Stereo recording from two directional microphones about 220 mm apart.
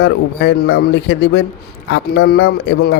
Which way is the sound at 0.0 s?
50° left (ahead or behind).